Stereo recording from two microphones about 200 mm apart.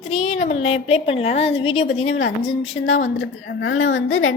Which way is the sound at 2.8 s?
70° left (ahead or behind).